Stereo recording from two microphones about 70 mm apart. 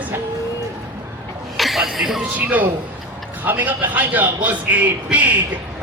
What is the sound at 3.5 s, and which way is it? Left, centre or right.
A man's voice, right.